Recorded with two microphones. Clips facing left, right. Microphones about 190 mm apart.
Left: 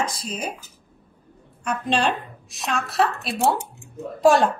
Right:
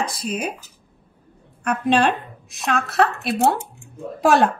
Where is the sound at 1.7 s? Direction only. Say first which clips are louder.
Right 5 dB; 60° right (ahead or behind).